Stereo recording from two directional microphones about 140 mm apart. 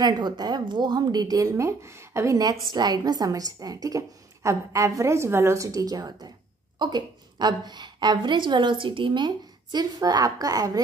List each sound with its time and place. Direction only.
0.0 s a woman's voice: 30° right (ahead or behind)